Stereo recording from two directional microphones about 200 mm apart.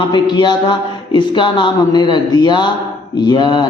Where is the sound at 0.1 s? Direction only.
20° left (ahead or behind).